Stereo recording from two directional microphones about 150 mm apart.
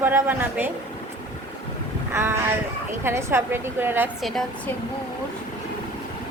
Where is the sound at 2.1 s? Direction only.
15° right (ahead or behind).